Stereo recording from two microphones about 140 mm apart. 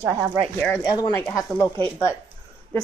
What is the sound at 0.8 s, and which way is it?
Speech, 25° left (ahead or behind).